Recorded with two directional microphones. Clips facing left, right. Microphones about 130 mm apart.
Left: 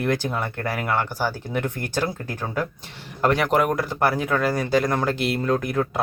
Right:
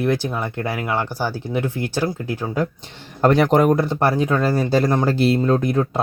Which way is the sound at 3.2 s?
35° right (ahead or behind).